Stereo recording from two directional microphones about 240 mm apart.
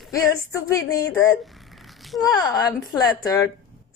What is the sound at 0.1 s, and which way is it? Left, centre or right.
Speech, centre.